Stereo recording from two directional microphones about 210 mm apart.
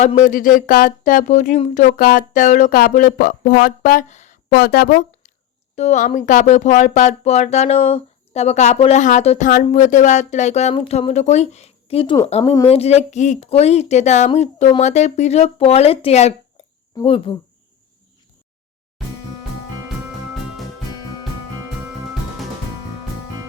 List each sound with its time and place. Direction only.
0.0 s speech: 35° left (ahead or behind)
4.5 s speech: 50° left (ahead or behind)
5.7 s speech: 35° left (ahead or behind)